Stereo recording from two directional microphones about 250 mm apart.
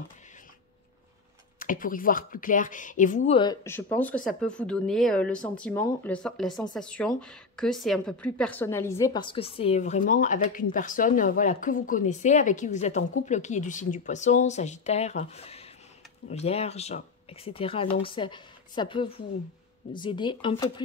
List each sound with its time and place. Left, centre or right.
1.6 s a woman's voice: left; by 20.8 s centre